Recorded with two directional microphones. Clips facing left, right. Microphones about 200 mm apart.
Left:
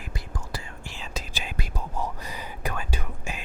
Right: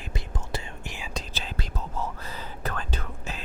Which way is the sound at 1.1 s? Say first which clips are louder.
Left 2 dB; 10° left (ahead or behind).